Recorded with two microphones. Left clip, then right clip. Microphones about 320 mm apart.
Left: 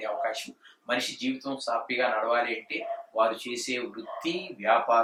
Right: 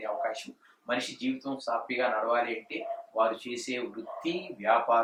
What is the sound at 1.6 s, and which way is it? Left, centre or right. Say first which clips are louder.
Speech: left 2 dB; centre.